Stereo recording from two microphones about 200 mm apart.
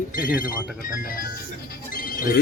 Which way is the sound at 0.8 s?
45° left (ahead or behind).